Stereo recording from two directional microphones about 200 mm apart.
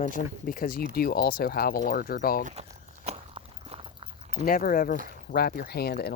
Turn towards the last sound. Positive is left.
turn(degrees=50)  # may be behind; listen again after turning